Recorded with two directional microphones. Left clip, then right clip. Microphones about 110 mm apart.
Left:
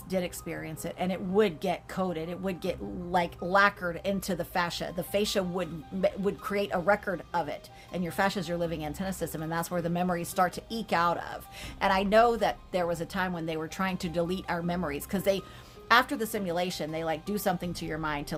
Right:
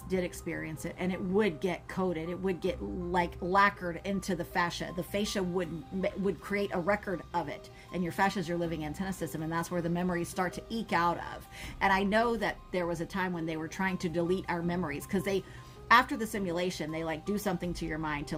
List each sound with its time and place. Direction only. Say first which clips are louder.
0.1 s speech: left 1 dB; 35° left (ahead or behind)